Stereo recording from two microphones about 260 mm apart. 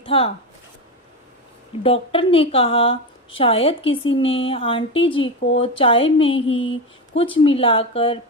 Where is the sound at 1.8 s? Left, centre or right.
Left.